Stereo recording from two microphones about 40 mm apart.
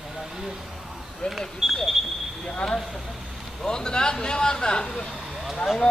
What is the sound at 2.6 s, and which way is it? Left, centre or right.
A man's voice, centre.